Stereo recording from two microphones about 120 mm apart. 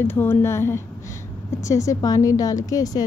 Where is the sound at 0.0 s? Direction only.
20° left (ahead or behind).